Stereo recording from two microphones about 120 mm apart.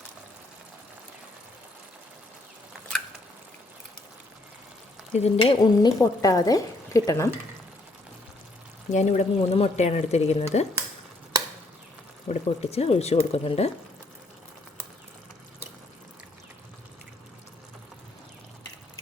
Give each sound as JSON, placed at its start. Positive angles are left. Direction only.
{"t": 5.1, "sound": "speech", "side_deg": 55}
{"t": 5.8, "sound": "speech", "side_deg": 30}
{"t": 8.9, "sound": "speech", "side_deg": 85}
{"t": 12.3, "sound": "speech", "side_deg": 60}